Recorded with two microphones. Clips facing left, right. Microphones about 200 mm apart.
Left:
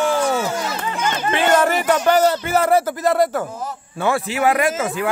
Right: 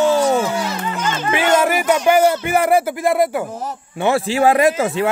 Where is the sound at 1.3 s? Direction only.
10° right (ahead or behind).